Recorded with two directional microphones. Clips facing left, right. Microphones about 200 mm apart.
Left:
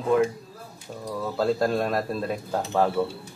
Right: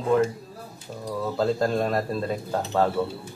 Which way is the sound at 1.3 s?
Centre (ahead or behind).